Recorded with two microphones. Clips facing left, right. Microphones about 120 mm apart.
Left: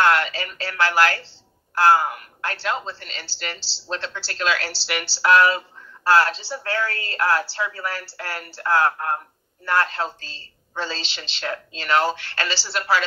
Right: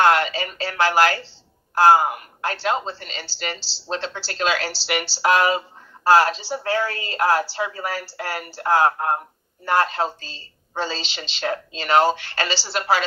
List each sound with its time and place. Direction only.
0.0 s speech: 20° right (ahead or behind)